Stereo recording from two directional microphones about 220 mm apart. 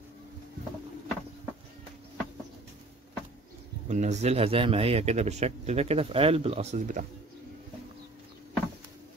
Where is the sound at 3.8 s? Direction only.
30° right (ahead or behind).